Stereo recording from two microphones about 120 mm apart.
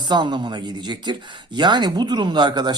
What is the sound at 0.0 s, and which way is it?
Speech, 40° right (ahead or behind).